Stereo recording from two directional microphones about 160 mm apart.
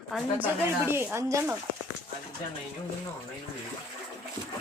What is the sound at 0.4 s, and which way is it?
Speech, 15° right (ahead or behind).